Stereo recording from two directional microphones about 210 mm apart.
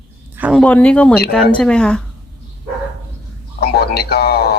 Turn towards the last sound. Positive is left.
turn(degrees=50)  # may be behind; listen again after turning